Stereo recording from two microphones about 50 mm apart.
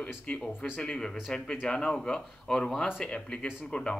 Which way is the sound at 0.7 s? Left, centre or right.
Centre.